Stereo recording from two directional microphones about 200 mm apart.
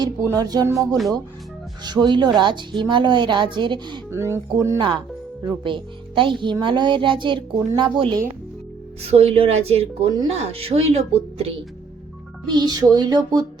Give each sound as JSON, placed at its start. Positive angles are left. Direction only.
{"t": 0.0, "sound": "music", "side_deg": -20}
{"t": 1.8, "sound": "a woman's voice", "side_deg": -20}
{"t": 12.5, "sound": "a woman's voice", "side_deg": -20}